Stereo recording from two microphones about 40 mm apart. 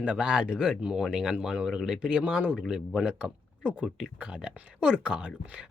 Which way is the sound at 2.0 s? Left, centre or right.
Right.